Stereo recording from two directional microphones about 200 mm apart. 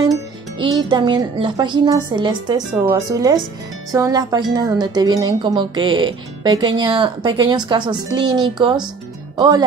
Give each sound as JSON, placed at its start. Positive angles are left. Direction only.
{"t": 0.6, "sound": "speech", "side_deg": -20}